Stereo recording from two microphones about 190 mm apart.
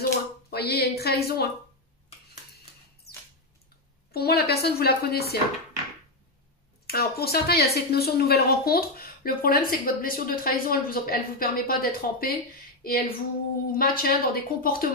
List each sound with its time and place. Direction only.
0.0 s a sound: 55° left (ahead or behind)
4.1 s a woman's voice: 55° left (ahead or behind)
6.9 s a woman's voice: 55° left (ahead or behind)